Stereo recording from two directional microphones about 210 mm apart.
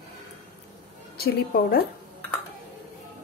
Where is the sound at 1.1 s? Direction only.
45° left (ahead or behind).